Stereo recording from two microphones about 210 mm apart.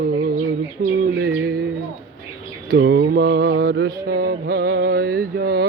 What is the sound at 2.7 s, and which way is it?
Mantra, 55° right (ahead or behind).